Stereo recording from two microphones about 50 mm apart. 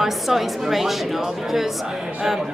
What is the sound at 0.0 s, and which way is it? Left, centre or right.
Speech, centre.